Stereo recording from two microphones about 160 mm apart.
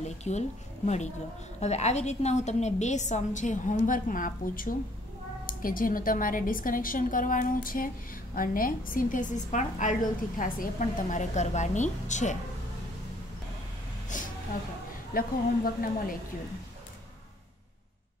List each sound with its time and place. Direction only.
0.0 s a woman's voice: 45° left (ahead or behind)
14.1 s a sound: 55° left (ahead or behind)
15.1 s a woman's voice: 65° left (ahead or behind)